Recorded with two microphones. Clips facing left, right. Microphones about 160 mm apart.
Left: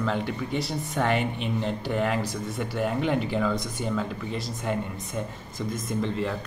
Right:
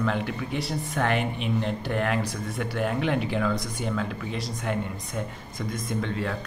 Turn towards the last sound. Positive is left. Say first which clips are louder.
# left 1 dB
turn(degrees=0)  # may be behind; listen again after turning